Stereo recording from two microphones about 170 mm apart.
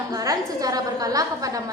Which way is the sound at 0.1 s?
20° right (ahead or behind).